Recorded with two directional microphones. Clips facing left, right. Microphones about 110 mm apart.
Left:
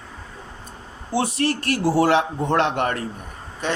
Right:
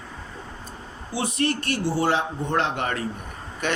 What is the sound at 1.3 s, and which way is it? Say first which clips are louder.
Speech: left 2 dB; 80° left.